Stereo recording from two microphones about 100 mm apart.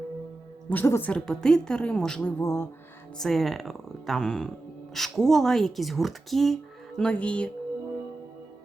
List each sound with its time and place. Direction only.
0.7 s a woman's voice: 20° left (ahead or behind)
1.1 s a woman's voice: 5° left (ahead or behind)
2.4 s a woman's voice: 30° left (ahead or behind)
3.2 s speech: centre (ahead or behind)